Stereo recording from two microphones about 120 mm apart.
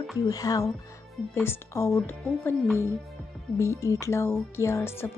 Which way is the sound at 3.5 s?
25° left (ahead or behind).